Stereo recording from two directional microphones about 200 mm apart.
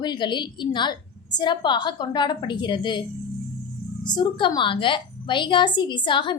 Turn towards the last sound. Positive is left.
turn(degrees=25)  # may be behind; listen again after turning